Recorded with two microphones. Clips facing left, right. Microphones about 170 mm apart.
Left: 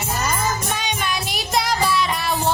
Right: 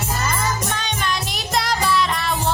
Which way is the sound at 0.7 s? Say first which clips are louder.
Even; 10° left (ahead or behind).